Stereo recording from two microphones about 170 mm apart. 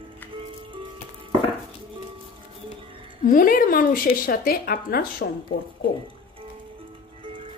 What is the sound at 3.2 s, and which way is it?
A woman's voice, 55° left (ahead or behind).